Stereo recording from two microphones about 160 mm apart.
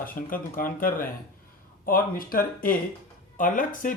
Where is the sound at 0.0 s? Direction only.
60° left (ahead or behind).